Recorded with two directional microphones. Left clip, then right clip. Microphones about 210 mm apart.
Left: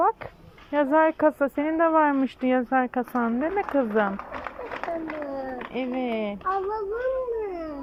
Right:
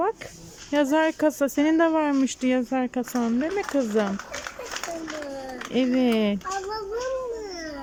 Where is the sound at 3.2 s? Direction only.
20° right (ahead or behind).